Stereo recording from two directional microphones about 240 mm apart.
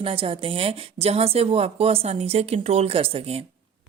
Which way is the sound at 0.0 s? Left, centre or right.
Right.